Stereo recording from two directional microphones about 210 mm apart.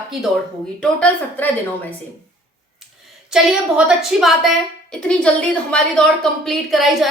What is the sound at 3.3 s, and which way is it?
A woman's voice, 5° right (ahead or behind).